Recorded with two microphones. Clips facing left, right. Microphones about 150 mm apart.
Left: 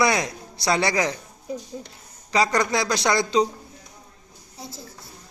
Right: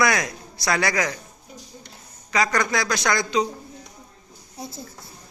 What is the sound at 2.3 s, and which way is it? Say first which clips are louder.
Speech: left 1 dB; 30° left (ahead or behind).